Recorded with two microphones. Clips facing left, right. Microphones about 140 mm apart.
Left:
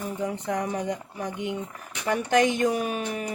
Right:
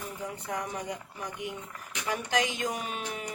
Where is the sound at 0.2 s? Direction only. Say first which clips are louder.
Left 7 dB; 65° left (ahead or behind).